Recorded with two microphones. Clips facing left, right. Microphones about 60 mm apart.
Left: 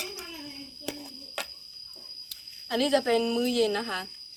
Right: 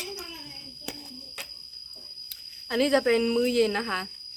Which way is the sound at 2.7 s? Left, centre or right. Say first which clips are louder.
Right 2 dB; right.